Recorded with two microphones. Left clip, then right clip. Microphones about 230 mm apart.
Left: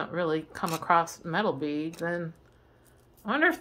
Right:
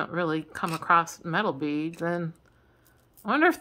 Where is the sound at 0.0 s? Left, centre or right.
Centre.